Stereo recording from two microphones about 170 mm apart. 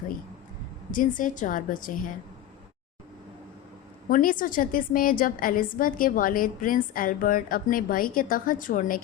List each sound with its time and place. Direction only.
0.9 s a woman's voice: 50° left (ahead or behind)
4.1 s a woman's voice: 55° left (ahead or behind)